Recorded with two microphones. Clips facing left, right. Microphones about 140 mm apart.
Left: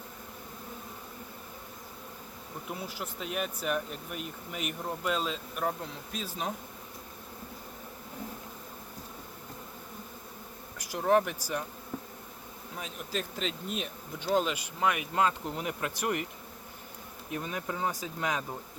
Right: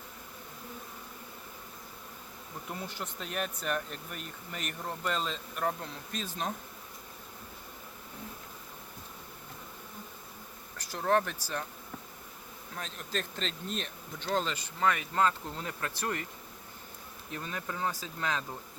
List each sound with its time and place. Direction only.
2.6 s speech: 5° left (ahead or behind)
10.8 s speech: 10° left (ahead or behind)
12.7 s speech: 10° left (ahead or behind)
17.3 s speech: 15° left (ahead or behind)